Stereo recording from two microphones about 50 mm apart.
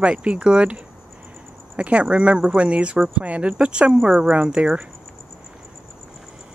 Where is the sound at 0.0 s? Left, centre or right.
Right.